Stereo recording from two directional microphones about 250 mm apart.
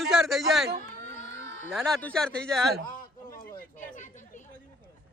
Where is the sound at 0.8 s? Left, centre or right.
Left.